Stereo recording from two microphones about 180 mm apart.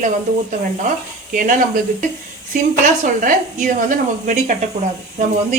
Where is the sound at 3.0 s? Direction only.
50° right (ahead or behind).